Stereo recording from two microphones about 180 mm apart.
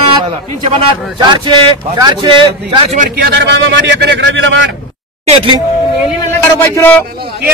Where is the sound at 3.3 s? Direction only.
75° right (ahead or behind); by 4.7 s 90° right.